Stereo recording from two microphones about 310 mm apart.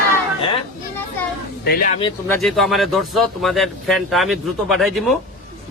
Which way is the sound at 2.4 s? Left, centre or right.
Centre.